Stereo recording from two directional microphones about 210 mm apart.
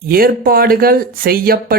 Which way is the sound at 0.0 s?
45° right (ahead or behind).